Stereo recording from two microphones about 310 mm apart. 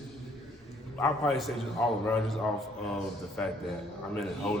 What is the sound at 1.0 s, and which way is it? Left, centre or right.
Speech, centre.